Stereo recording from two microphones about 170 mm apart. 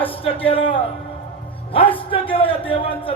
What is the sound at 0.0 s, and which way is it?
Speech, 35° left (ahead or behind).